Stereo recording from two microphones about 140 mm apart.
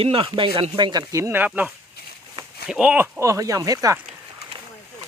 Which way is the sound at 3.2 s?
25° right (ahead or behind).